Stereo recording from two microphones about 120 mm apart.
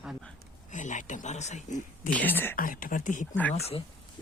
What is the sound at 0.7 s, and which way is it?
Speech, 90° left.